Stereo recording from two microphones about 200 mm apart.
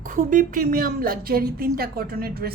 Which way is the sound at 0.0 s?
40° right (ahead or behind).